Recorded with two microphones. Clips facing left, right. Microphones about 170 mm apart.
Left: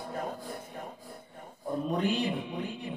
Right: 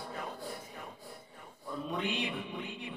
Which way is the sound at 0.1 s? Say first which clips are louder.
Left 6 dB; 45° left (ahead or behind).